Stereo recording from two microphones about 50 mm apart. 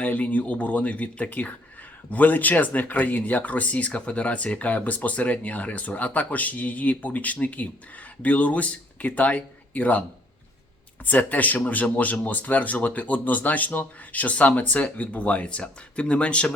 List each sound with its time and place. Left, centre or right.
0.0 s speech: left
11.0 s speech: left